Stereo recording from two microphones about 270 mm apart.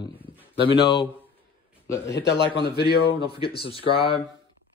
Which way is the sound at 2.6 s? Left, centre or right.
Left.